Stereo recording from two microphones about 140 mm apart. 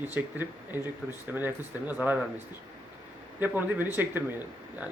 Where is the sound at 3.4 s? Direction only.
10° right (ahead or behind).